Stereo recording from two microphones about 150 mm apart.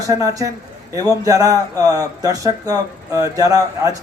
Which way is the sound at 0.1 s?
20° right (ahead or behind).